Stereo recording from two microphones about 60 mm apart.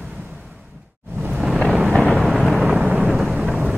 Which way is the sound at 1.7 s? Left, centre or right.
Centre.